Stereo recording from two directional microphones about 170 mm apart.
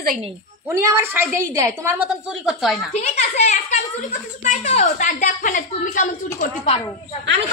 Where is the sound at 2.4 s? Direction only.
Centre (ahead or behind).